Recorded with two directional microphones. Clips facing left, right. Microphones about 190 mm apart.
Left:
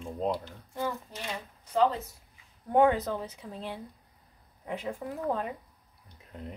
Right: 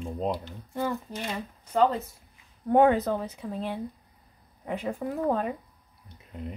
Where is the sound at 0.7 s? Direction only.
55° right (ahead or behind).